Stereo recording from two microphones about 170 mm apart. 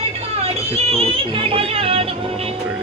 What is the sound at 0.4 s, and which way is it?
Speech, 35° right (ahead or behind).